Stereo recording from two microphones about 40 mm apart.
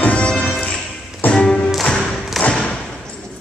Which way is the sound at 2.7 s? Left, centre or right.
Centre.